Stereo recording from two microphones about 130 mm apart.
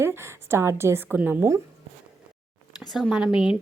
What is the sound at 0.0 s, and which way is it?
A woman's voice, 20° right (ahead or behind).